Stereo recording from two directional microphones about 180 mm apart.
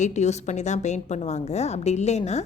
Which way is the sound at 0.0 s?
40° left (ahead or behind).